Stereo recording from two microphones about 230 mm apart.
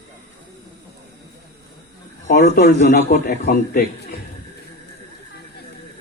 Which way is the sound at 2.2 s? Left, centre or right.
Left.